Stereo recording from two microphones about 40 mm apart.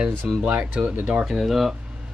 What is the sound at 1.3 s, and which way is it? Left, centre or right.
Speech, centre.